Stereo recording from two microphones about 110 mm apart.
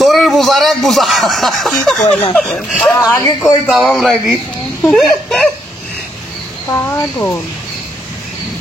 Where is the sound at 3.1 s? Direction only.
25° left (ahead or behind).